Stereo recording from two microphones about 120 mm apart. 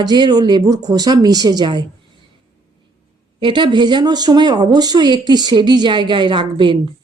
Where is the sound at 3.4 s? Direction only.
40° right (ahead or behind).